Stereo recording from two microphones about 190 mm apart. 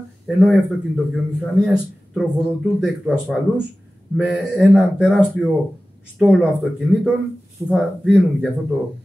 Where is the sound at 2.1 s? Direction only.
Centre (ahead or behind).